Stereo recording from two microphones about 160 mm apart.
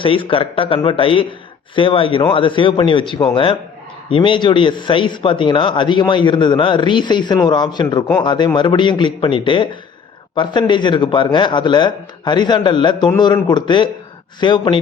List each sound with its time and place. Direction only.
0.0 s a man's voice: 35° left (ahead or behind)